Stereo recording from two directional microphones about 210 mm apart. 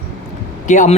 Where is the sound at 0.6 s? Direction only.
35° left (ahead or behind).